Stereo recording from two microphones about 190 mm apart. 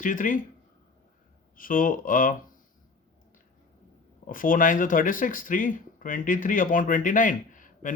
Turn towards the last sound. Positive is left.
turn(degrees=45)  # may be behind; listen again after turning